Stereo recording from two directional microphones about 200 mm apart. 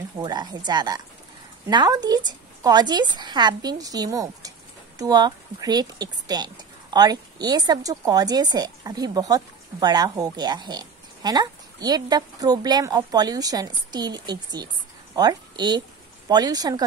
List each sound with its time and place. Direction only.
0.2 s a woman's voice: 20° right (ahead or behind)